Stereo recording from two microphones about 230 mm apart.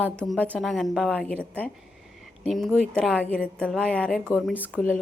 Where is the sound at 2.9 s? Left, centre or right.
Centre.